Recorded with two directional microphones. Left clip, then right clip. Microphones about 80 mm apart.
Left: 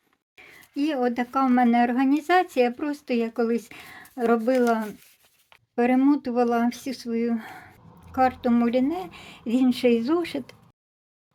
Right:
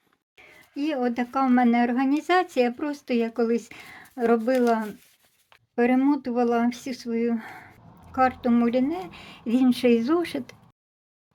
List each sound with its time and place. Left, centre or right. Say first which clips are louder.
0.3 s a sound: left 2 dB; left
0.8 s speech: left 2 dB; left
9.3 s speech: right 1 dB; centre